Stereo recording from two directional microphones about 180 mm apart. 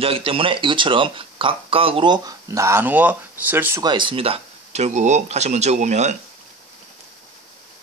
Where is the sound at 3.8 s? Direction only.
25° right (ahead or behind).